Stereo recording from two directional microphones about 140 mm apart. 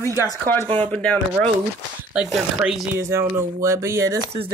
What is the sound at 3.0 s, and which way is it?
Speech, 20° right (ahead or behind).